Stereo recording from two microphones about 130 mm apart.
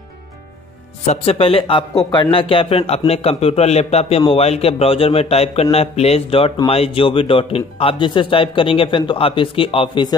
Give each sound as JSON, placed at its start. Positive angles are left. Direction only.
{"t": 1.0, "sound": "a man's voice", "side_deg": 55}